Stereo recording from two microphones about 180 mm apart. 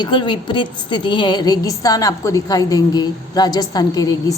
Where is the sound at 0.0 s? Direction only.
25° left (ahead or behind).